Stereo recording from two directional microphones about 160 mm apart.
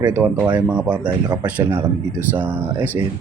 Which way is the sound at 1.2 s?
25° right (ahead or behind).